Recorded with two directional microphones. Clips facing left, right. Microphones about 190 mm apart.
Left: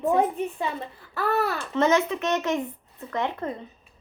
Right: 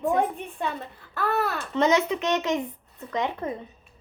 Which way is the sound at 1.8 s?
20° right (ahead or behind).